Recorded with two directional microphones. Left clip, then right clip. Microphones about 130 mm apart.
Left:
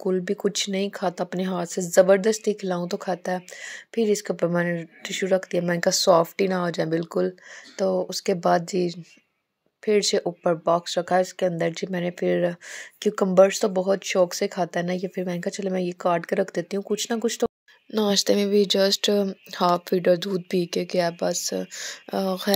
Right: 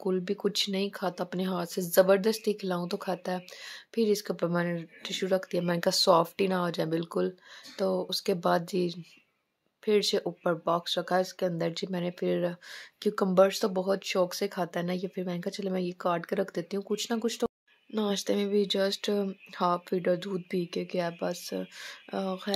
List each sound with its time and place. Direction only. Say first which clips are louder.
0.0 s speech: left 5 dB; 30° left (ahead or behind)